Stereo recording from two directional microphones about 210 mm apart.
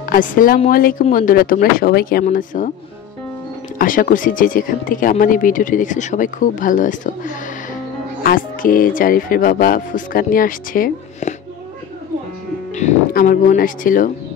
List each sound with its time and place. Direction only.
0.1 s speech: 40° left (ahead or behind)
3.7 s speech: 40° left (ahead or behind)
12.7 s speech: 35° left (ahead or behind)